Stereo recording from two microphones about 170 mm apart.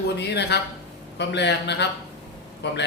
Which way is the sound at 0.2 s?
80° left.